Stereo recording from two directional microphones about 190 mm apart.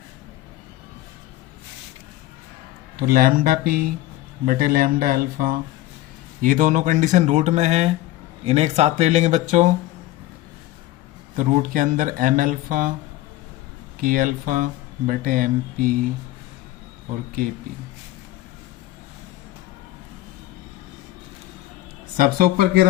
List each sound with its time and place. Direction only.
3.1 s speech: 50° right (ahead or behind)
11.3 s speech: 45° right (ahead or behind)
14.0 s speech: 45° right (ahead or behind)
22.2 s speech: 50° right (ahead or behind)